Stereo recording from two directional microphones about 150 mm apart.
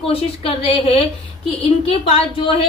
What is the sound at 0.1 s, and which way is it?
Speech, 40° left (ahead or behind).